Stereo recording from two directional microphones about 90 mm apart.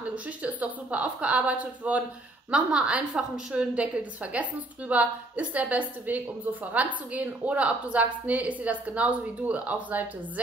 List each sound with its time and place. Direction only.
0.4 s a woman's voice: 15° right (ahead or behind)